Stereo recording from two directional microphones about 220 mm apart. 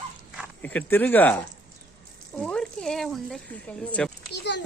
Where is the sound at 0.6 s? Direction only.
10° left (ahead or behind).